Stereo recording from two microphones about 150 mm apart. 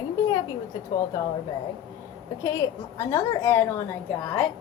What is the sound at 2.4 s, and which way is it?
A woman's voice, 20° left (ahead or behind).